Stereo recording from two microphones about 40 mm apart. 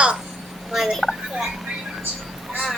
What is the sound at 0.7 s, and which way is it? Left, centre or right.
Speech, centre.